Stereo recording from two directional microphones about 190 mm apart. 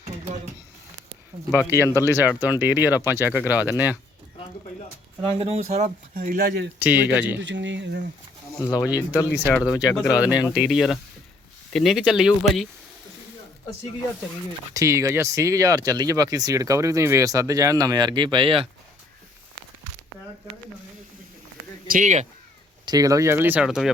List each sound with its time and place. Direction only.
1.5 s speech: 10° right (ahead or behind)
5.2 s speech: 30° right (ahead or behind)
6.1 s speech: 50° right (ahead or behind)
6.7 s speech: 10° right (ahead or behind)
7.4 s speech: 70° right (ahead or behind)
8.6 s speech: 20° left (ahead or behind)
10.5 s speech: 5° right (ahead or behind)
14.7 s speech: 15° right (ahead or behind)
21.8 s speech: 45° right (ahead or behind)
22.9 s speech: 20° right (ahead or behind); by 23.9 s centre (ahead or behind)